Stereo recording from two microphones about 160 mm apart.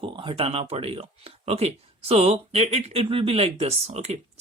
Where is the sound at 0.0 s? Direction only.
30° right (ahead or behind).